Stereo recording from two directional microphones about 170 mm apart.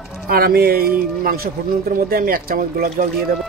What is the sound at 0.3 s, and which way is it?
Speech, 60° right (ahead or behind).